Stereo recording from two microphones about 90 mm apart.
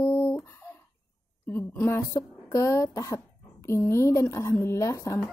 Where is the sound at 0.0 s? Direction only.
35° left (ahead or behind).